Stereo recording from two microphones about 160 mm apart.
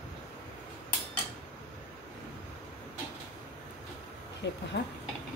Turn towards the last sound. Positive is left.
turn(degrees=90)